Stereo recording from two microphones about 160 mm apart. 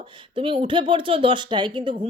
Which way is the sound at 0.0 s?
30° right (ahead or behind).